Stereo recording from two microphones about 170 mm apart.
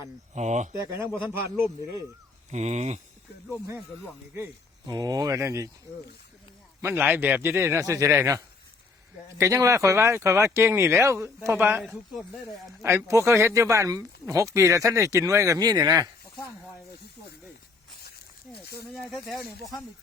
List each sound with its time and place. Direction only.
0.3 s speech: 45° right (ahead or behind)
0.9 s speech: 15° right (ahead or behind)
2.5 s speech: 40° right (ahead or behind)
4.9 s speech: 25° right (ahead or behind)
6.8 s speech: 10° right (ahead or behind)
9.4 s speech: 20° right (ahead or behind)
11.8 s speech: centre (ahead or behind)
12.8 s speech: 15° right (ahead or behind)